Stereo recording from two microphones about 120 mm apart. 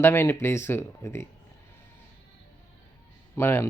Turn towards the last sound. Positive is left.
turn(degrees=20)  # may be behind; listen again after turning